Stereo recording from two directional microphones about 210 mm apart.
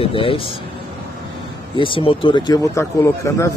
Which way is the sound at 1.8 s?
25° left (ahead or behind).